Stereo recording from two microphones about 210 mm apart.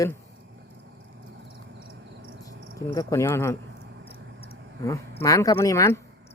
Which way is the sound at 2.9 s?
15° left (ahead or behind).